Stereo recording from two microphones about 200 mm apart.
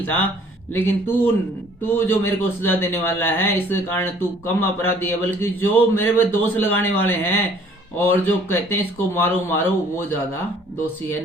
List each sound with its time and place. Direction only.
0.0 s a man's voice: 10° left (ahead or behind)